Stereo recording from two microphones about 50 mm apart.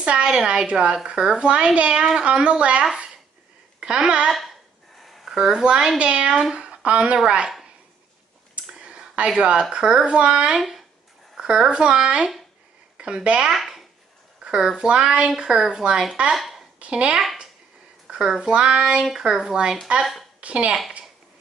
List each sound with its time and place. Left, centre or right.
0.0 s speech: right
3.8 s speech: centre
5.0 s a sound: centre
5.3 s speech: centre
8.6 s a sound: centre
9.4 s speech: centre
13.5 s speech: centre
14.4 s a sound: centre
14.8 s speech: centre
16.3 s a sound: centre
16.8 s speech: right
20.3 s speech: right